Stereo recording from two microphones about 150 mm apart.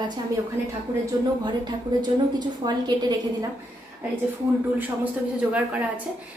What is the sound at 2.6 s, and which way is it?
Speech, 30° right (ahead or behind).